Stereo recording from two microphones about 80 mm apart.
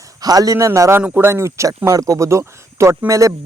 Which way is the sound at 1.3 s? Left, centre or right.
Right.